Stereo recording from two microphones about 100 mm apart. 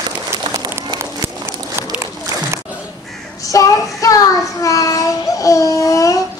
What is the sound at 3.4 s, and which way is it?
Child singing, 35° left (ahead or behind).